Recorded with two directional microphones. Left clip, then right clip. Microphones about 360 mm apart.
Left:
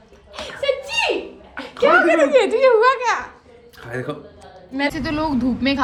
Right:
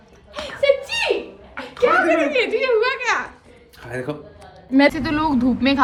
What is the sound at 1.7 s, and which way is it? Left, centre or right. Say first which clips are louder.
A child's voice: left 2 dB; centre.